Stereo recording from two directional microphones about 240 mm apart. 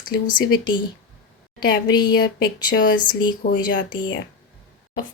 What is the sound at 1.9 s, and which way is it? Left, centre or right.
Speech, centre.